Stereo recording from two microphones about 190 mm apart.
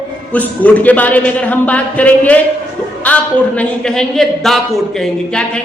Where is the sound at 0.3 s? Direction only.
10° left (ahead or behind).